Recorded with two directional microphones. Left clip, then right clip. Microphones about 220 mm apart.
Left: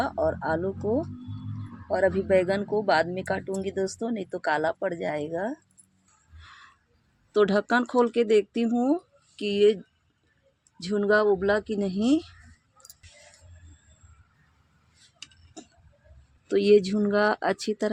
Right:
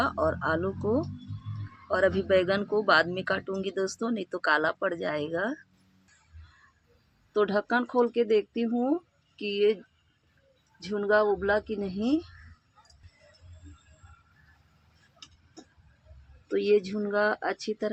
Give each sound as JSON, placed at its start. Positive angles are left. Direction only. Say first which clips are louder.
{"t": 0.0, "sound": "speech", "louder": "left 1 dB", "side_deg": 10}
{"t": 7.3, "sound": "speech", "louder": "left 3 dB", "side_deg": 45}
{"t": 10.8, "sound": "speech", "louder": "left 2 dB", "side_deg": 40}
{"t": 16.5, "sound": "speech", "louder": "left 5 dB", "side_deg": 45}